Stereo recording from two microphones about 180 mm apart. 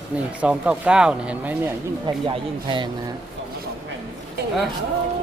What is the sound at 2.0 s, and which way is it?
Speech, 25° right (ahead or behind).